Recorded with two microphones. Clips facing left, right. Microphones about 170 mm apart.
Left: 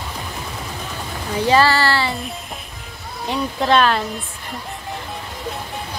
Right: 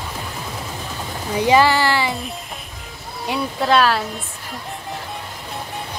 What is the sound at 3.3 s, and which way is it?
Speech, 5° right (ahead or behind).